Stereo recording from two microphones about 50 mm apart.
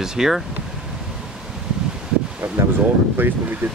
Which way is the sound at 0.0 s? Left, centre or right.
Centre.